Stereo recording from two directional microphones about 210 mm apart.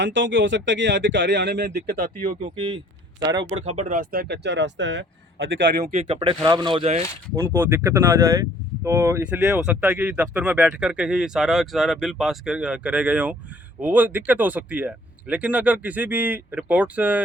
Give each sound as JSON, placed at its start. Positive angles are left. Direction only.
{"t": 0.0, "sound": "speech", "side_deg": -60}
{"t": 2.6, "sound": "a sound", "side_deg": -20}
{"t": 3.7, "sound": "speech", "side_deg": -35}
{"t": 5.8, "sound": "speech", "side_deg": -30}
{"t": 7.3, "sound": "speech", "side_deg": -10}